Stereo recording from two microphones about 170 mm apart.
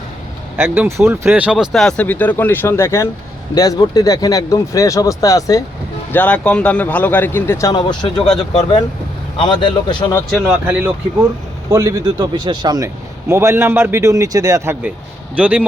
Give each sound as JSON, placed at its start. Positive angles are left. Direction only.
{"t": 0.5, "sound": "speech", "side_deg": -10}
{"t": 6.1, "sound": "a man's voice", "side_deg": 10}
{"t": 7.7, "sound": "speech", "side_deg": 25}
{"t": 9.4, "sound": "speech", "side_deg": 25}
{"t": 10.3, "sound": "a man's voice", "side_deg": -10}